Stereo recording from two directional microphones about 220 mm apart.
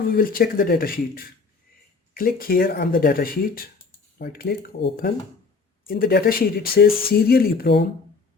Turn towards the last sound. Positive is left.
turn(degrees=45)  # may be behind; listen again after turning